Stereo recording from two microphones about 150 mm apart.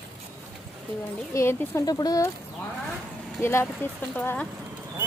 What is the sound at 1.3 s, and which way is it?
Speech, 20° left (ahead or behind).